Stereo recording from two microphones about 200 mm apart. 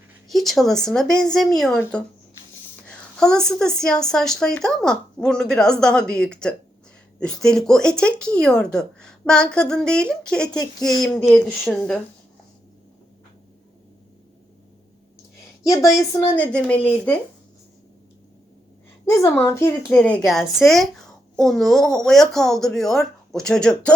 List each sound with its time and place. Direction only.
0.3 s speech: centre (ahead or behind)
15.6 s speech: 15° left (ahead or behind)
19.1 s speech: 15° left (ahead or behind)